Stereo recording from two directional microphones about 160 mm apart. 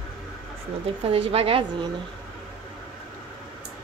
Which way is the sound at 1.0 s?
35° right (ahead or behind).